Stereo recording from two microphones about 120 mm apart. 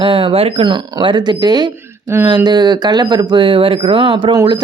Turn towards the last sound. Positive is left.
turn(degrees=-45)  # may be behind; listen again after turning